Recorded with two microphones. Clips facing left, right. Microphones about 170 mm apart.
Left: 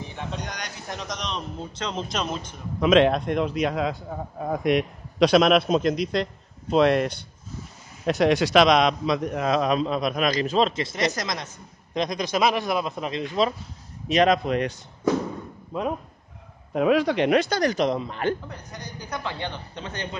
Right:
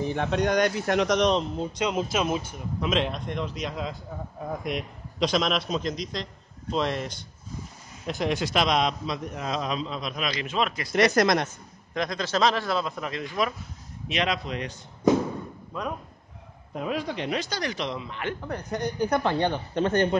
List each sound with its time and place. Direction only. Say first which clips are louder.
0.1 s speech: right 10 dB; 65° right (ahead or behind)
1.6 s speech: right 4 dB; 10° right (ahead or behind)
2.8 s a man's voice: left 9 dB; 75° left (ahead or behind)
8.1 s a man's voice: left 7 dB; 80° left; by 10.7 s 35° left (ahead or behind)
11.1 s speech: right 9 dB; 60° right (ahead or behind)
11.9 s a man's voice: left 2 dB; 20° left (ahead or behind)
14.0 s speech: left 8 dB; 45° left (ahead or behind)
15.7 s speech: left 5 dB; 25° left (ahead or behind)
16.7 s speech: left 9 dB; 80° left; by 18.3 s 40° left (ahead or behind)
18.5 s speech: right 9 dB; 55° right (ahead or behind)